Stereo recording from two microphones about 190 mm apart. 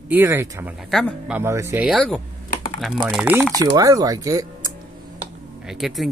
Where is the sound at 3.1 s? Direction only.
10° right (ahead or behind).